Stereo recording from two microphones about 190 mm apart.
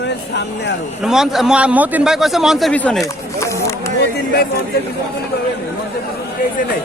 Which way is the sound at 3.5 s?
15° left (ahead or behind).